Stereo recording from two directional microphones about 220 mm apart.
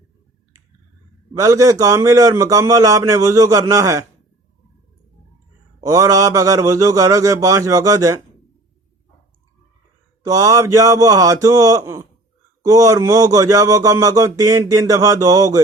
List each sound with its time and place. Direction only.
1.3 s speech: 15° right (ahead or behind)
5.8 s speech: 15° right (ahead or behind)
10.2 s speech: 15° right (ahead or behind)